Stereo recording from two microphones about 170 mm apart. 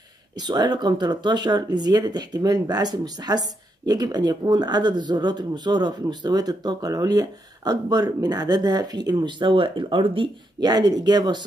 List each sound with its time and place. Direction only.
0.4 s speech: 25° right (ahead or behind)